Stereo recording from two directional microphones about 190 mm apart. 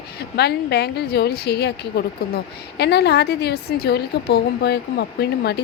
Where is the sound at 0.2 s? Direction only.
60° left (ahead or behind).